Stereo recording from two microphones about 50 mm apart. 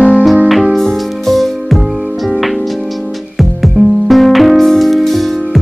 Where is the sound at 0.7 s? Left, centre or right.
Centre.